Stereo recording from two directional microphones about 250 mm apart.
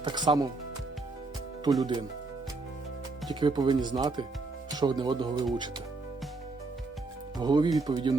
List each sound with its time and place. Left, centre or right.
0.0 s speech: centre
1.8 s speech: centre
3.2 s speech: centre
7.3 s speech: centre